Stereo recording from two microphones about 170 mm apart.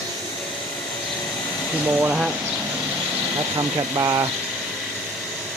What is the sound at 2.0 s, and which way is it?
Speech, 5° right (ahead or behind).